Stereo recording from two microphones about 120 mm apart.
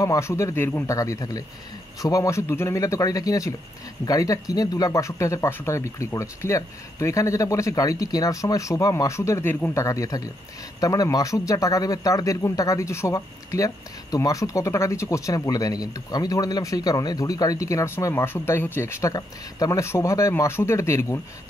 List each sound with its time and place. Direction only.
0.0 s speech: 25° left (ahead or behind)